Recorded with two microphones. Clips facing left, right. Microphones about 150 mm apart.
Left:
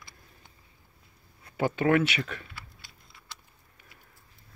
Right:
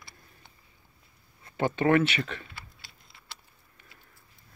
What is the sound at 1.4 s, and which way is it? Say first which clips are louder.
Speech: even; 5° left (ahead or behind).